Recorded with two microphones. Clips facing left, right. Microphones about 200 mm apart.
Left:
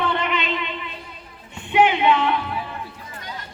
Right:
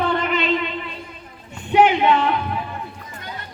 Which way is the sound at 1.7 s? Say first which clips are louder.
Right 2 dB; 40° right (ahead or behind).